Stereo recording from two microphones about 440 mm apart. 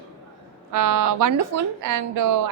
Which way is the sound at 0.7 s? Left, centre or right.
Right.